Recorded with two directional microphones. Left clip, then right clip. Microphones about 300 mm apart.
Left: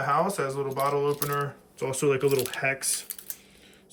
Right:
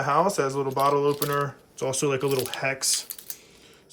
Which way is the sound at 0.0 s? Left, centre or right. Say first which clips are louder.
Right 3 dB; centre.